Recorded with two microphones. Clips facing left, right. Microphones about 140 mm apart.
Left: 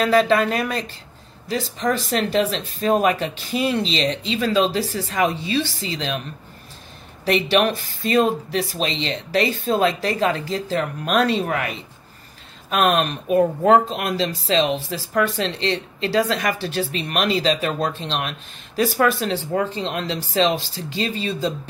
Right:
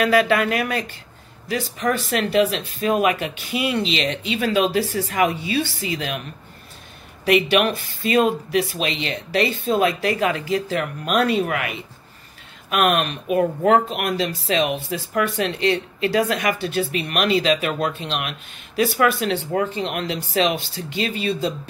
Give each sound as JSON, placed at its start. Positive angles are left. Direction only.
{"t": 0.0, "sound": "speech", "side_deg": 35}
{"t": 7.2, "sound": "speech", "side_deg": 35}